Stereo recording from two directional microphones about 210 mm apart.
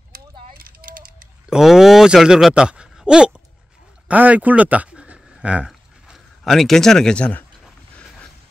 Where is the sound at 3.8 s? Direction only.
5° right (ahead or behind).